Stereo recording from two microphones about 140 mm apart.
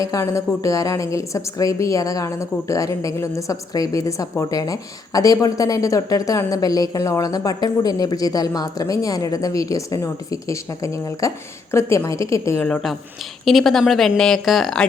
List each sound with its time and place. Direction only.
0.0 s a woman's voice: 20° left (ahead or behind)
12.5 s speech: 5° left (ahead or behind)